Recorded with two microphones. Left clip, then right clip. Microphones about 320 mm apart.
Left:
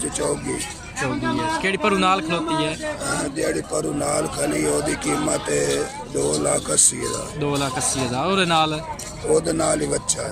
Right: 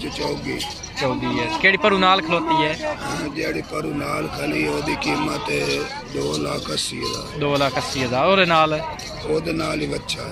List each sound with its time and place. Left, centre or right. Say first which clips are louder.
1.6 s a man's voice: right 6 dB; centre
3.7 s speech: left 2 dB; left
4.5 s speech: right 2 dB; left
5.3 s a man's voice: left 1 dB; centre
6.3 s speech: left 3 dB; left
7.3 s a man's voice: right 5 dB; centre
9.3 s speech: left 4 dB; left